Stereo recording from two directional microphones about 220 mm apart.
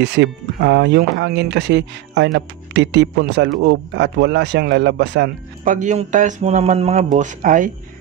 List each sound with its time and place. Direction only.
0.0 s speech: 50° right (ahead or behind)
5.6 s speech: 35° right (ahead or behind)